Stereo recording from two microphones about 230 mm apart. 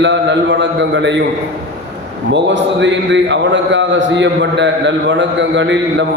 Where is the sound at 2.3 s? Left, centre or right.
Right.